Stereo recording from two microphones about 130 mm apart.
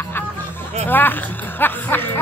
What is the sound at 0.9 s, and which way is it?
Music, 15° left (ahead or behind).